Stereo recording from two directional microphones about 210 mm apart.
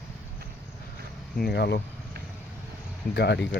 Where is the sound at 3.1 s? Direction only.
50° left (ahead or behind).